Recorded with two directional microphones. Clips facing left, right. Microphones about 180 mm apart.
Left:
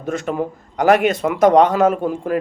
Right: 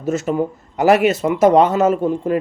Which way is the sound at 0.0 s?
5° right (ahead or behind).